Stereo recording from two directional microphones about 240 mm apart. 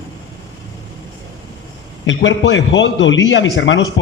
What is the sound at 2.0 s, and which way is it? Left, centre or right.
A man's voice, left.